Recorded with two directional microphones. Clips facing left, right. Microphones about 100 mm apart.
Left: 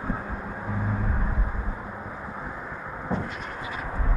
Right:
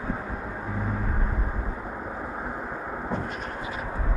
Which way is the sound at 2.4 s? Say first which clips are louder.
Right 3 dB; 50° right (ahead or behind).